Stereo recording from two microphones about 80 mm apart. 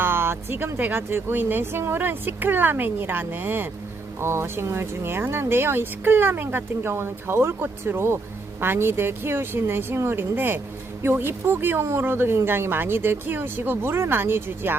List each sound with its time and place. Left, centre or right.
0.0 s speech: right